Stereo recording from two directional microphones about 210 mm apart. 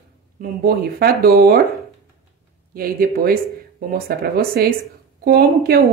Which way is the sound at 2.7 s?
45° right (ahead or behind).